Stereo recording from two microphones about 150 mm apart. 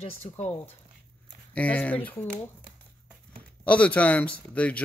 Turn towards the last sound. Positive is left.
turn(degrees=10)  # may be behind; listen again after turning